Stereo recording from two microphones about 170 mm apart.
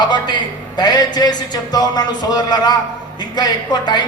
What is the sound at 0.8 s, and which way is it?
A man's voice, 25° left (ahead or behind).